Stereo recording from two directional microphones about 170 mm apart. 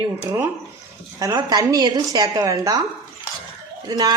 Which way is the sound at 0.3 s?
15° right (ahead or behind).